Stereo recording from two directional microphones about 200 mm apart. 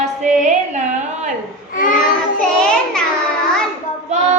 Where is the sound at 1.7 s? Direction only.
45° left (ahead or behind).